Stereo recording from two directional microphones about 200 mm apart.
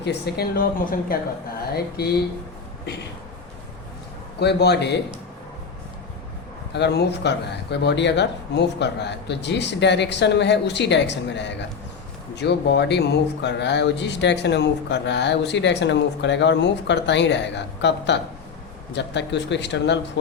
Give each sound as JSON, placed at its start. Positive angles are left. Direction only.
{"t": 0.0, "sound": "a woman's voice", "side_deg": 55}
{"t": 4.4, "sound": "speech", "side_deg": 55}
{"t": 6.7, "sound": "speech", "side_deg": 55}